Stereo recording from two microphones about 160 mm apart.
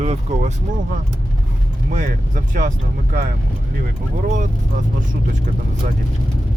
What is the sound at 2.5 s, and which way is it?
Speech, 55° right (ahead or behind).